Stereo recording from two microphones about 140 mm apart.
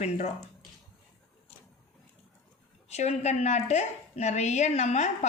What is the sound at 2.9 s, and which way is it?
A woman's voice, 55° left (ahead or behind).